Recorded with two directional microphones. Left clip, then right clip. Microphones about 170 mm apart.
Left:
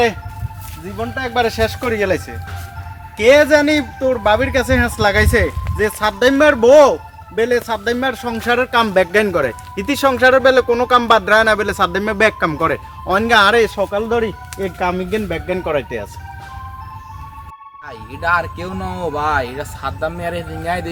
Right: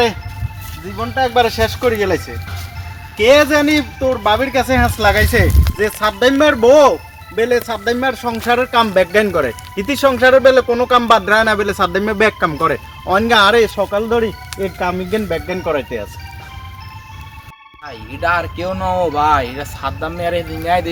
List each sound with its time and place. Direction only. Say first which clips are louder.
0.9 s speech: right 4 dB; 15° left (ahead or behind)
18.2 s speech: right 1 dB; 15° left (ahead or behind)